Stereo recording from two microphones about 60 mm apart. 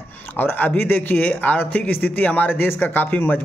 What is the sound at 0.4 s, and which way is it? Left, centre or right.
Speech, left.